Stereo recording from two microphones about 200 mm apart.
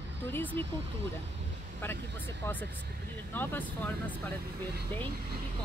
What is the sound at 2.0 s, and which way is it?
Speech, 60° right (ahead or behind).